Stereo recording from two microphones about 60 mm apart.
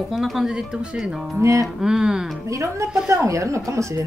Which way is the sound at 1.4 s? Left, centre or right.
Right.